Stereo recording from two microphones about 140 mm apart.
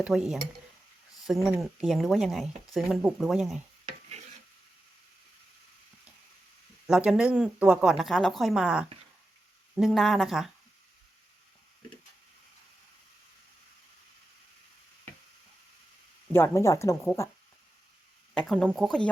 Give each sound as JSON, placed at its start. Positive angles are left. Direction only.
{"t": 0.0, "sound": "speech", "side_deg": -5}
{"t": 6.8, "sound": "speech", "side_deg": -5}
{"t": 16.3, "sound": "speech", "side_deg": 20}
{"t": 18.3, "sound": "speech", "side_deg": 5}